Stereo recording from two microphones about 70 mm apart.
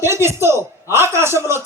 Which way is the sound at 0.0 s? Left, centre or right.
Right.